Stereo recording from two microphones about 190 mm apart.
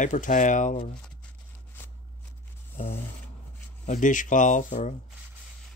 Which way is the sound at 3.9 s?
40° left (ahead or behind).